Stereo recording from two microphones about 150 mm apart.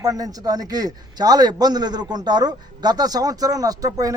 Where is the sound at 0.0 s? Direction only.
25° right (ahead or behind).